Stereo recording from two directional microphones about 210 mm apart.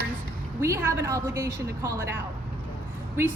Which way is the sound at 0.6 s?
10° right (ahead or behind).